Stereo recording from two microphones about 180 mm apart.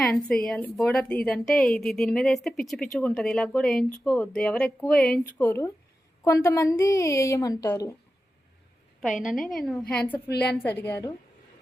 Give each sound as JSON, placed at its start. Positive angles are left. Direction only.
{"t": 0.3, "sound": "a woman's voice", "side_deg": 5}
{"t": 9.0, "sound": "a woman's voice", "side_deg": 0}
{"t": 10.2, "sound": "a woman's voice", "side_deg": 65}
{"t": 10.6, "sound": "speech", "side_deg": 10}